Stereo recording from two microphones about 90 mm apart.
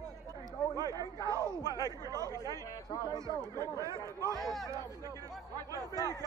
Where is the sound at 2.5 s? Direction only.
40° left (ahead or behind).